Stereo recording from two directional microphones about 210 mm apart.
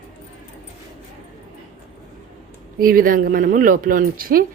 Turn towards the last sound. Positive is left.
turn(degrees=-45)  # may be behind; listen again after turning